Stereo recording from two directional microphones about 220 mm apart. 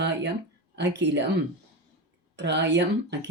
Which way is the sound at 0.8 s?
55° right (ahead or behind).